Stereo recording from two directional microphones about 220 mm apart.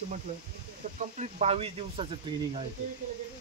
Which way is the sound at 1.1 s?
30° right (ahead or behind).